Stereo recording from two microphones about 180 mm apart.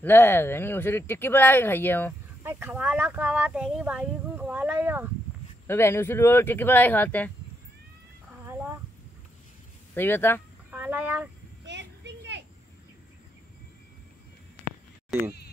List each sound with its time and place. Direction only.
0.0 s speech: 10° left (ahead or behind)
2.4 s speech: 10° right (ahead or behind)
5.7 s speech: 15° left (ahead or behind)
9.9 s speech: 10° left (ahead or behind)
10.7 s a sound: 10° right (ahead or behind)
11.6 s a sound: 75° right (ahead or behind)